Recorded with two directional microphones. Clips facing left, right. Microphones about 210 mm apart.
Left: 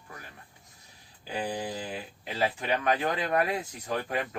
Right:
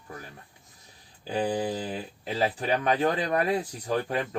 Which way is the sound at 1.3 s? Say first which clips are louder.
Right 5 dB; 35° right (ahead or behind).